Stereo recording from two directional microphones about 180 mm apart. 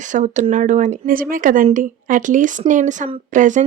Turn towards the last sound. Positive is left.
turn(degrees=-45)  # may be behind; listen again after turning